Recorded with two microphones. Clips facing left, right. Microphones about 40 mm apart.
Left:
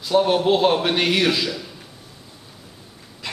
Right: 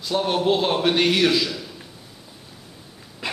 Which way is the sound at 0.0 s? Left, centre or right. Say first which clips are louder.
Left 4 dB; centre.